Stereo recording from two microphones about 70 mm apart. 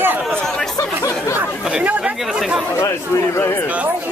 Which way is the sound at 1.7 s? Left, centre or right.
Centre.